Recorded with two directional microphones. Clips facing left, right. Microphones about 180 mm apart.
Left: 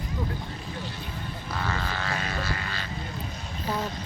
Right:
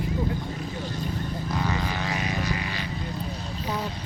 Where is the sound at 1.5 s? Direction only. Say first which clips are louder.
Right 2 dB; 15° right (ahead or behind).